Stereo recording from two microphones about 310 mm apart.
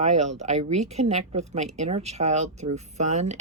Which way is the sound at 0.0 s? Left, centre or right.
Right.